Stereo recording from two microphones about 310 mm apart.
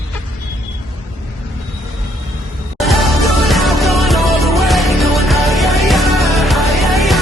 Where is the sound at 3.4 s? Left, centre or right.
Centre.